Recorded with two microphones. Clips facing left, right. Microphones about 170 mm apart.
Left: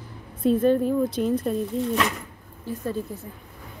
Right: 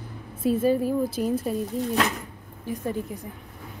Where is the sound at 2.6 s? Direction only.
15° right (ahead or behind).